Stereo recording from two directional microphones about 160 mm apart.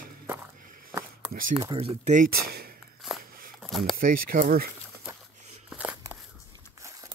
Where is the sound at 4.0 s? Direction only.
60° right (ahead or behind).